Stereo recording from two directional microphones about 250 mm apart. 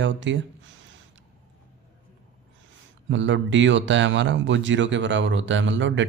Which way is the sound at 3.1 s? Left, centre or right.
Right.